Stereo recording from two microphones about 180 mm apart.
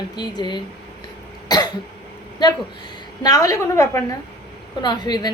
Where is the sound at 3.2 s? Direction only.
20° left (ahead or behind).